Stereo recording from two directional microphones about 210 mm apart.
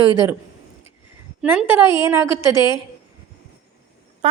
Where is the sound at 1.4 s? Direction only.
5° right (ahead or behind).